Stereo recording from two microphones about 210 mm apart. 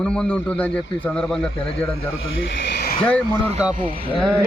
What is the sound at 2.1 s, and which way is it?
Speech, 60° left (ahead or behind).